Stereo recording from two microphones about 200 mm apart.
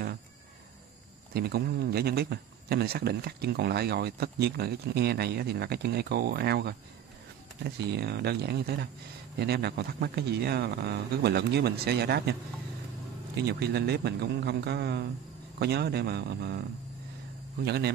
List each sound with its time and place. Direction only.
1.3 s speech: 50° right (ahead or behind)
13.5 s speech: 55° right (ahead or behind)
17.6 s speech: 55° right (ahead or behind)